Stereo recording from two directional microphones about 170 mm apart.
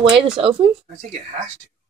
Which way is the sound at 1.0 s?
45° right (ahead or behind).